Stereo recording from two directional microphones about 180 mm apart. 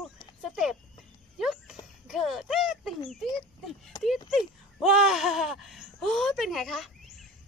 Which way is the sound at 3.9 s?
20° left (ahead or behind).